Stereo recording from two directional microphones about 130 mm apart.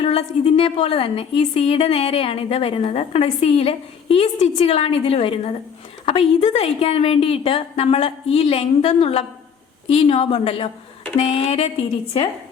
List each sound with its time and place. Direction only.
0.0 s a woman's voice: 50° left (ahead or behind)